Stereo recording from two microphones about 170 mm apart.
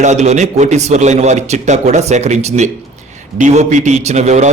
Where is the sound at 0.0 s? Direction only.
45° right (ahead or behind).